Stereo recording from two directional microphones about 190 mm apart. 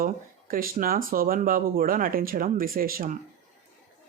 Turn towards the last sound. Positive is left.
turn(degrees=-50)  # may be behind; listen again after turning